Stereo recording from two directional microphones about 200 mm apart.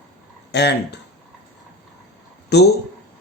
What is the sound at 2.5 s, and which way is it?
Speech, 55° left (ahead or behind).